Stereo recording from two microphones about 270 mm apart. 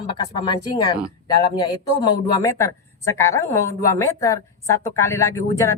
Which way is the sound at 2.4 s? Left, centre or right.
Centre.